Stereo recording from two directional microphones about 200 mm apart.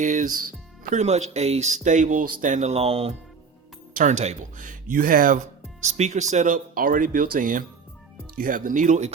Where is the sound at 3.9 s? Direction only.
40° right (ahead or behind).